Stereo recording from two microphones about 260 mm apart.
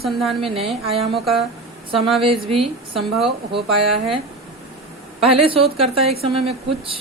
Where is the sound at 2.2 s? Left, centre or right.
Right.